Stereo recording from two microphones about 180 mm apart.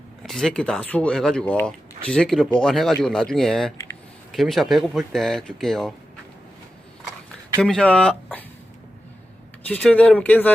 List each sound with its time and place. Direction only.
0.2 s speech: centre (ahead or behind)
7.6 s speech: 5° left (ahead or behind)
9.6 s speech: 10° left (ahead or behind)